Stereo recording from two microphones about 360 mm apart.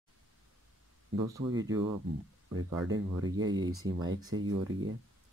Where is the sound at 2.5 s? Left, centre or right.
Right.